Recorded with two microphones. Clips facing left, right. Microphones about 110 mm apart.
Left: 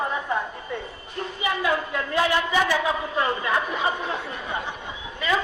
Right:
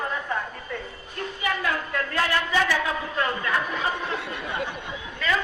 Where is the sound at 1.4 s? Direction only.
15° left (ahead or behind).